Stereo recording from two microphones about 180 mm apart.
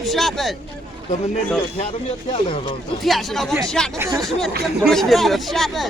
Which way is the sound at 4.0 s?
15° right (ahead or behind).